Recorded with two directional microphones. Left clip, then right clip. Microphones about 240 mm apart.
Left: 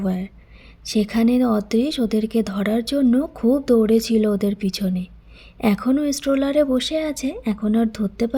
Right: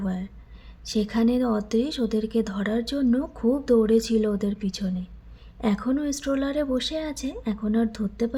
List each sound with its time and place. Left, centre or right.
0.0 s a woman's voice: left